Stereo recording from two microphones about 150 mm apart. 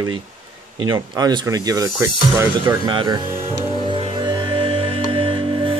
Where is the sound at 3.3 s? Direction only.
15° right (ahead or behind).